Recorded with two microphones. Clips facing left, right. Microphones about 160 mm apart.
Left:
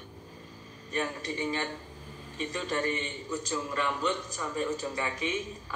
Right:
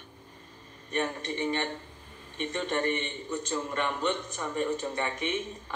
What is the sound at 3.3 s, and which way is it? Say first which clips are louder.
A man's voice: right 1 dB; 20° right (ahead or behind).